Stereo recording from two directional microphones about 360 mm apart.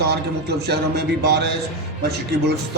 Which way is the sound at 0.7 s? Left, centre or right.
Right.